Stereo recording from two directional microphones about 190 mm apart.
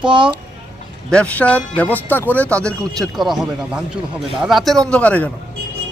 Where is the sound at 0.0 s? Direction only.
25° right (ahead or behind).